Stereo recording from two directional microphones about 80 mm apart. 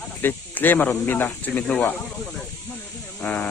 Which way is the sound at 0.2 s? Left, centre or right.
Left.